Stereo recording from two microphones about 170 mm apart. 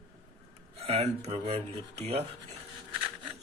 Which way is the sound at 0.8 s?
35° right (ahead or behind).